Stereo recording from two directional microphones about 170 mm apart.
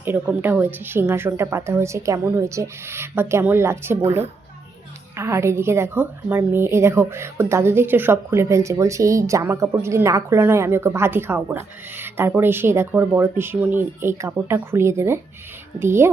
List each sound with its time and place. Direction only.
0.0 s a woman's voice: 10° right (ahead or behind)